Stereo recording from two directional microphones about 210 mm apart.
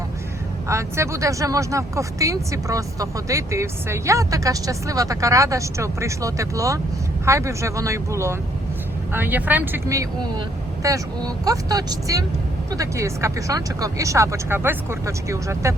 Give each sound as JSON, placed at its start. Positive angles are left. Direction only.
{"t": 0.7, "sound": "speech", "side_deg": -15}